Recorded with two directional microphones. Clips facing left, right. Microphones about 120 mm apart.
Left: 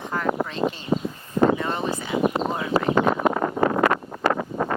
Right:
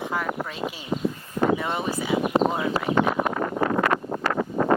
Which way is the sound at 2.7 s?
35° left (ahead or behind).